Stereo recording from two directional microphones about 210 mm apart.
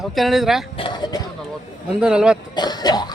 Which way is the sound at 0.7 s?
20° left (ahead or behind).